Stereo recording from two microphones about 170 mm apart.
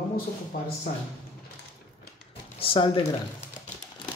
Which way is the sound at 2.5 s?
30° left (ahead or behind).